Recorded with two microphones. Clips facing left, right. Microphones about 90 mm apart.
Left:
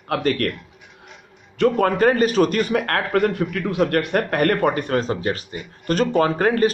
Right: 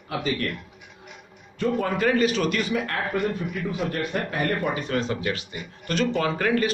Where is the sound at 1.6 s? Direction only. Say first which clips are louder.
Left 7 dB; 60° left (ahead or behind).